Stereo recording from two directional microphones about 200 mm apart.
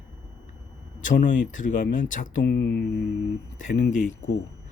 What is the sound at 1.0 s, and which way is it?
Speech, 40° left (ahead or behind).